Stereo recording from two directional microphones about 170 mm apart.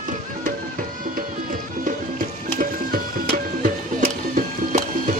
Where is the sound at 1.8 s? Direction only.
55° right (ahead or behind).